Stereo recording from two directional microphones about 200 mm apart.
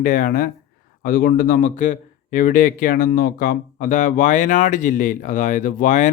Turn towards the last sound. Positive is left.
turn(degrees=40)  # may be behind; listen again after turning